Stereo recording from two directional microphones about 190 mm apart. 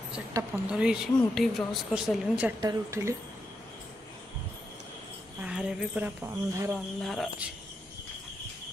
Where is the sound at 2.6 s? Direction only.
20° right (ahead or behind).